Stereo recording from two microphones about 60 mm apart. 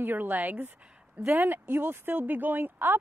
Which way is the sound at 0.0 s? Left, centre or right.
Right.